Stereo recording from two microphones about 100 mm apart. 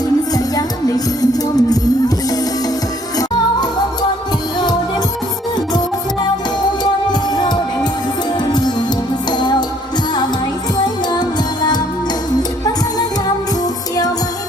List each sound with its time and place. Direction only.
0.3 s music: 40° left (ahead or behind)
7.1 s music: 45° left (ahead or behind)
9.3 s music: 45° left (ahead or behind)
10.8 s music: 45° left (ahead or behind)